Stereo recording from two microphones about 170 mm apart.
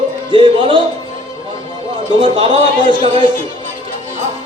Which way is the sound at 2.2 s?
30° right (ahead or behind).